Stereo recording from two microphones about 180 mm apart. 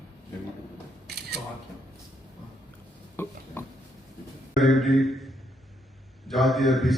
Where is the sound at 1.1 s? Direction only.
65° right (ahead or behind).